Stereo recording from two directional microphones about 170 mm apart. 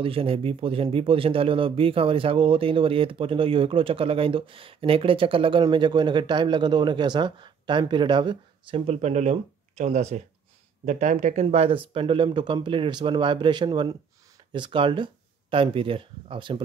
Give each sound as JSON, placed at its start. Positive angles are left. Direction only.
{"t": 0.0, "sound": "speech", "side_deg": -30}